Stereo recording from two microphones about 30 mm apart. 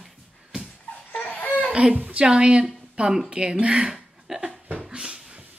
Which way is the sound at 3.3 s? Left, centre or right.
Right.